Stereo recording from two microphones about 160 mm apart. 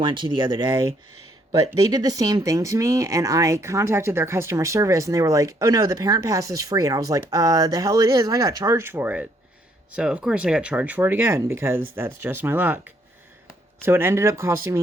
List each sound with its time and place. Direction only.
0.0 s speech: 30° right (ahead or behind)